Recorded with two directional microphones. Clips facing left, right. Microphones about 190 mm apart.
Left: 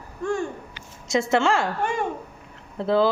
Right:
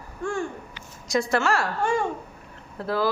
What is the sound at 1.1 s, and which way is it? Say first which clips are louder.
Speech: left 2 dB; 25° left (ahead or behind).